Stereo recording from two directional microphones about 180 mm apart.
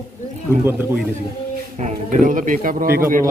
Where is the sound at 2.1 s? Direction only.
45° right (ahead or behind).